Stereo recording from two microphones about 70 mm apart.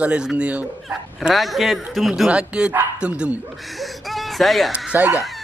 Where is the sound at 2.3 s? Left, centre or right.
Centre.